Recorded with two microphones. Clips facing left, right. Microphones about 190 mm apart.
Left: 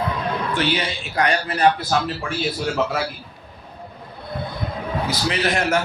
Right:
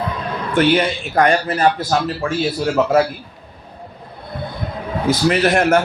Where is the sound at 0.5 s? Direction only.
55° right (ahead or behind).